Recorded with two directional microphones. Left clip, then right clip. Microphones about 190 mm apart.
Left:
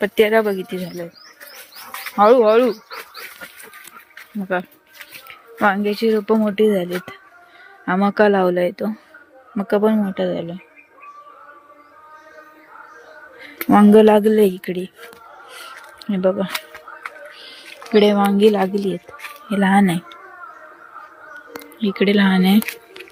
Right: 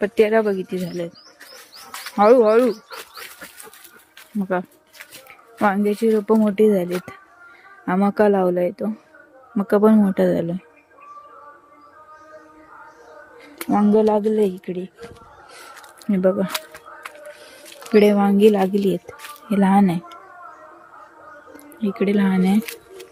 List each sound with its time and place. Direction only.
0.0 s speech: 10° right (ahead or behind)
2.1 s speech: 20° right (ahead or behind)
2.6 s speech: 5° left (ahead or behind)
4.4 s speech: 20° right (ahead or behind)
5.6 s speech: 20° right (ahead or behind)
7.9 s speech: 10° right (ahead or behind)
9.6 s speech: 20° right (ahead or behind); by 10.6 s 40° right (ahead or behind)
13.7 s speech: 20° left (ahead or behind); by 14.8 s centre (ahead or behind)
16.0 s speech: 20° right (ahead or behind)
17.9 s speech: 15° right (ahead or behind)
18.8 s speech: 25° right (ahead or behind)
19.5 s speech: 15° right (ahead or behind)
21.8 s speech: centre (ahead or behind)